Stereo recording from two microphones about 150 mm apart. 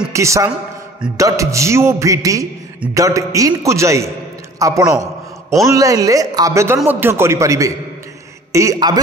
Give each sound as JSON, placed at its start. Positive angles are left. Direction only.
{"t": 0.1, "sound": "music", "side_deg": -20}
{"t": 4.6, "sound": "a man's voice", "side_deg": -20}
{"t": 5.7, "sound": "music", "side_deg": -20}
{"t": 6.9, "sound": "a man's voice", "side_deg": -15}
{"t": 8.5, "sound": "music", "side_deg": -20}